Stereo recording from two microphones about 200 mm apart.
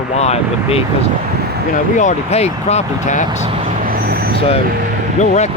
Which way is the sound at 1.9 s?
35° left (ahead or behind).